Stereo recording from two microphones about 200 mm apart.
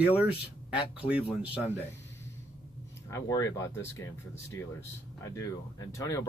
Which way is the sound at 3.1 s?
15° left (ahead or behind).